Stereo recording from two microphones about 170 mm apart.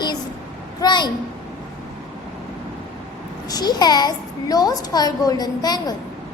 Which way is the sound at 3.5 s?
25° left (ahead or behind).